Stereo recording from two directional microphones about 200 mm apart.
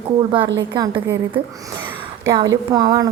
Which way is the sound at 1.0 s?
15° right (ahead or behind).